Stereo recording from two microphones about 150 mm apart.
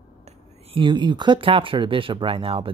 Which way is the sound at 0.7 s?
30° right (ahead or behind).